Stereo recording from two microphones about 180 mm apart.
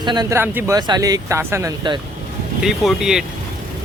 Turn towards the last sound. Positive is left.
turn(degrees=0)  # may be behind; listen again after turning